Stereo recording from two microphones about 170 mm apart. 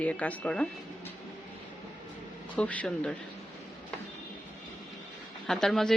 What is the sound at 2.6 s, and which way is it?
Speech, 5° left (ahead or behind).